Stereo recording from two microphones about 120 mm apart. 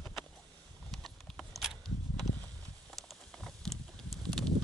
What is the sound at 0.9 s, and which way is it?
Clip-clop, centre (ahead or behind).